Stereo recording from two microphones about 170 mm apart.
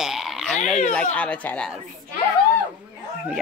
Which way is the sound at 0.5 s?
45° left (ahead or behind).